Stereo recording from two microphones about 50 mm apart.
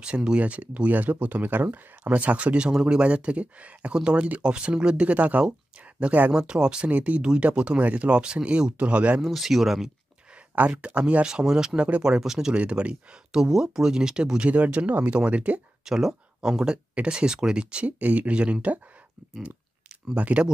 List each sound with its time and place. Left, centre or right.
0.0 s speech: centre
6.3 s speech: centre
6.9 s speech: right
9.2 s speech: centre
10.5 s speech: right
11.2 s speech: centre
12.5 s speech: right
13.4 s speech: centre
14.5 s speech: right
15.8 s speech: centre; by 18.8 s right
20.2 s speech: right